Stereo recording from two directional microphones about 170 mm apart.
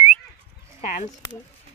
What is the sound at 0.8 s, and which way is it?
Speech, 50° left (ahead or behind).